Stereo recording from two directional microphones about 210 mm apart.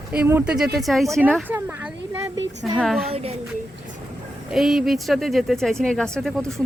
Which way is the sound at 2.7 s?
Centre (ahead or behind).